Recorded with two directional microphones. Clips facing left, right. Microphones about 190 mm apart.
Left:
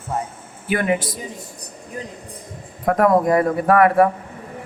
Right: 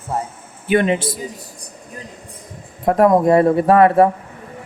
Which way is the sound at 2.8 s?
25° right (ahead or behind).